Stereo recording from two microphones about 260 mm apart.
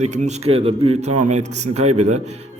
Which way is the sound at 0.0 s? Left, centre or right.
Right.